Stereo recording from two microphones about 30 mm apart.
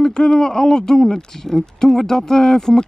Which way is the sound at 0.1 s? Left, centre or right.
Left.